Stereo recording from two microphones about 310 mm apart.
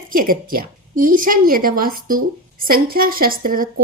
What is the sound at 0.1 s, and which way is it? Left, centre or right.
Speech, right.